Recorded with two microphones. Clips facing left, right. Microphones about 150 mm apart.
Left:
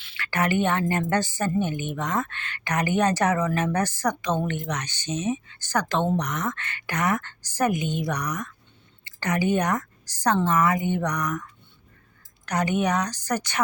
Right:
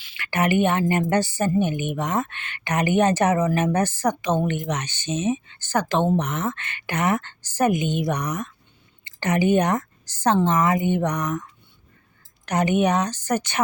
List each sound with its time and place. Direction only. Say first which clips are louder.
0.2 s a woman's voice: right 3 dB; 20° right (ahead or behind)
12.5 s a woman's voice: right 4 dB; 20° right (ahead or behind)